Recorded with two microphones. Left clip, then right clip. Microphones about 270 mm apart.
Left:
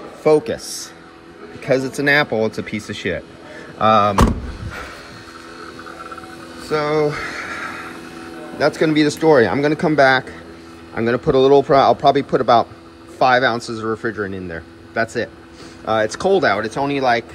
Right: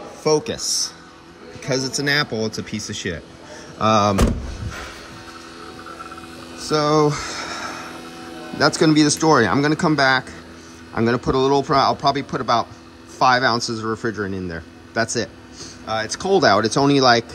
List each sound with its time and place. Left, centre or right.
0.2 s a man's voice: centre
6.6 s music: centre
8.5 s a man's voice: centre
15.9 s a man's voice: centre
16.3 s speech: centre